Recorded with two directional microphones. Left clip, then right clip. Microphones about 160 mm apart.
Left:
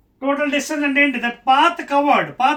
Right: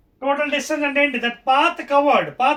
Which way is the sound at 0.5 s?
25° right (ahead or behind).